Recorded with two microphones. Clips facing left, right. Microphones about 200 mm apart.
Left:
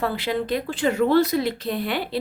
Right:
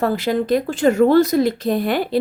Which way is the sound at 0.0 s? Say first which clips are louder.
Right 6 dB; 45° right (ahead or behind).